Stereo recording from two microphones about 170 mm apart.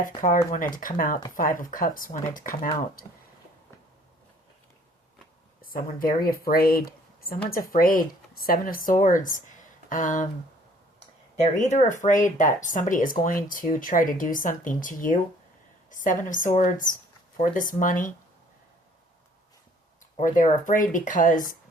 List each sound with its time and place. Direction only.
0.2 s speech: 50° left (ahead or behind)
5.6 s a woman's voice: 55° left (ahead or behind)
11.3 s a woman's voice: 45° left (ahead or behind)
20.1 s speech: 50° left (ahead or behind)